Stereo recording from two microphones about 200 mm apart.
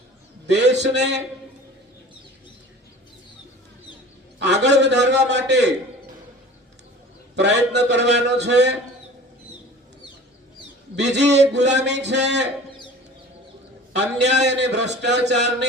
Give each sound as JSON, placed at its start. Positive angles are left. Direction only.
{"t": 0.4, "sound": "a sound", "side_deg": -60}
{"t": 0.8, "sound": "a man's voice", "side_deg": -60}
{"t": 4.4, "sound": "a man's voice", "side_deg": -60}
{"t": 7.3, "sound": "a man's voice", "side_deg": -60}
{"t": 10.9, "sound": "a man's voice", "side_deg": -60}
{"t": 13.9, "sound": "a man's voice", "side_deg": -60}